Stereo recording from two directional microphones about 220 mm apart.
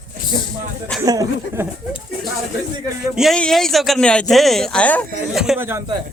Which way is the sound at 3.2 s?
Centre (ahead or behind).